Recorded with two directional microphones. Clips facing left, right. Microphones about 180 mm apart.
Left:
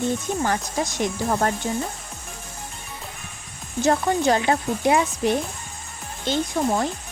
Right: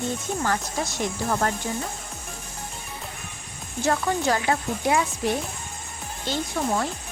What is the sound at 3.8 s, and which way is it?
Speech, 25° left (ahead or behind).